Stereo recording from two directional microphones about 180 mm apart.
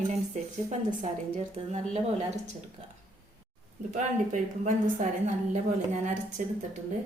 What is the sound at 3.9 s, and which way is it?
A woman's voice, 40° right (ahead or behind).